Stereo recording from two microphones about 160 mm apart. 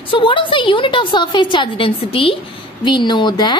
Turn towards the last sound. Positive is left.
turn(degrees=25)  # may be behind; listen again after turning